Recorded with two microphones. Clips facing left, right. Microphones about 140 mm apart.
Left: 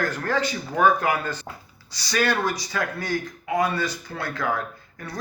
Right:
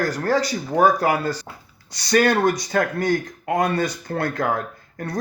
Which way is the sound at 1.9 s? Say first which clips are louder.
Right 6 dB; 50° right (ahead or behind).